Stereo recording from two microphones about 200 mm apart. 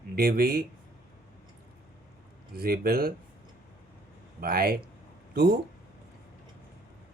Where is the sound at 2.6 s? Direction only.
50° right (ahead or behind).